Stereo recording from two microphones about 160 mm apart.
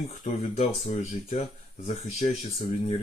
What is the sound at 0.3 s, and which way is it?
Speech, 40° left (ahead or behind).